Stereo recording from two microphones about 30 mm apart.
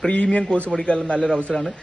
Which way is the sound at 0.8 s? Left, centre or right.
Left.